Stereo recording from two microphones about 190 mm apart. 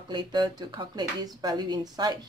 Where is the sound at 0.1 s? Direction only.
25° right (ahead or behind).